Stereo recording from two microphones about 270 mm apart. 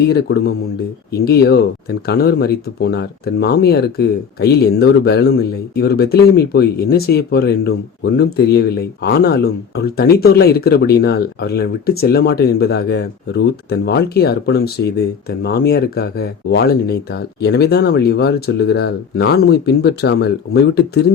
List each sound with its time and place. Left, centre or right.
0.0 s speech: left